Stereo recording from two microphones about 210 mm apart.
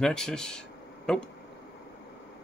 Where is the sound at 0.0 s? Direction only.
5° left (ahead or behind).